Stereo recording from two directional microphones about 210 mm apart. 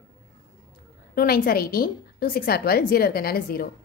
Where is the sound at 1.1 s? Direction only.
45° left (ahead or behind).